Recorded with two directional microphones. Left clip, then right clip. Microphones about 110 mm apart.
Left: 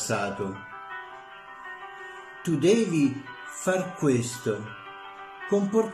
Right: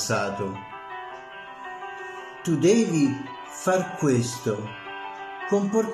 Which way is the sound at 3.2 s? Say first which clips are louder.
Right 3 dB; 30° right (ahead or behind).